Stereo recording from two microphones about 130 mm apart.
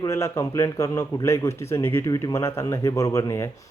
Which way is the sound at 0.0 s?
20° left (ahead or behind).